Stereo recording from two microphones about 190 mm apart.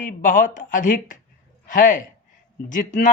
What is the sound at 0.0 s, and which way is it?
Speech, 45° left (ahead or behind).